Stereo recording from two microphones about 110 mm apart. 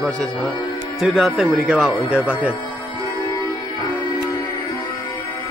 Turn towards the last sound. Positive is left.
turn(degrees=30)  # may be behind; listen again after turning